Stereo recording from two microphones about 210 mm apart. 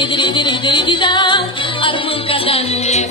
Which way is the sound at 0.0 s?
20° left (ahead or behind).